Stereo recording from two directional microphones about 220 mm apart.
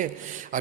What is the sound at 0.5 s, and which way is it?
Mantra, 35° right (ahead or behind).